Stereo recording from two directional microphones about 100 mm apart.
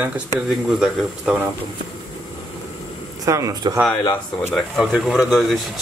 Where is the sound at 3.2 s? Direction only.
35° right (ahead or behind).